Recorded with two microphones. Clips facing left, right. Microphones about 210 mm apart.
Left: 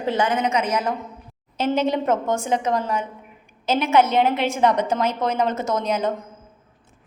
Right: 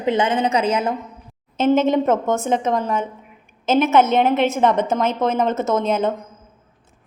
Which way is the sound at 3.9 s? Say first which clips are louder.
Even; 20° right (ahead or behind).